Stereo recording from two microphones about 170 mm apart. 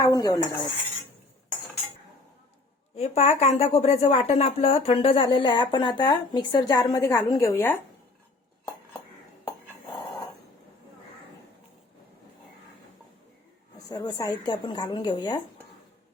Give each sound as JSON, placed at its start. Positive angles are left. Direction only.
{"t": 0.0, "sound": "dishes", "side_deg": 20}
{"t": 2.9, "sound": "a woman's voice", "side_deg": 40}
{"t": 13.9, "sound": "a woman's voice", "side_deg": 25}